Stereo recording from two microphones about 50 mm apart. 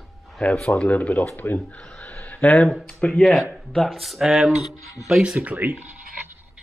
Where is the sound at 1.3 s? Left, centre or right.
Left.